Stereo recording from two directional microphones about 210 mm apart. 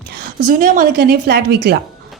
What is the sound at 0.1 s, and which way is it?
A woman's voice, 40° right (ahead or behind).